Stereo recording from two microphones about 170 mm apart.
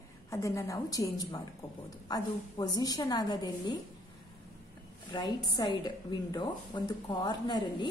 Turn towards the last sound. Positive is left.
turn(degrees=25)  # may be behind; listen again after turning